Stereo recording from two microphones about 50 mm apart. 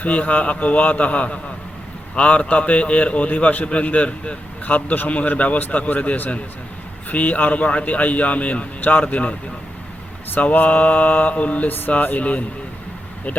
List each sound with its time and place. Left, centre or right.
0.0 s a man's voice: left
10.3 s a man's voice: left